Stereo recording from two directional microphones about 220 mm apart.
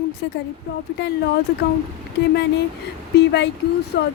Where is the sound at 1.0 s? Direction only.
50° left (ahead or behind).